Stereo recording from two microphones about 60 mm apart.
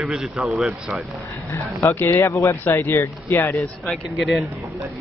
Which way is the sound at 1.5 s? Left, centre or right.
Left.